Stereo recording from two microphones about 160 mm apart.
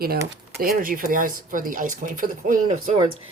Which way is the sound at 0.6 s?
65° right (ahead or behind).